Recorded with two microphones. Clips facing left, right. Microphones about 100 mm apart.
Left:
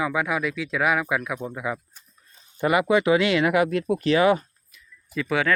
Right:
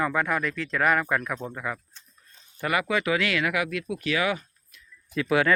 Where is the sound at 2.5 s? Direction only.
20° left (ahead or behind).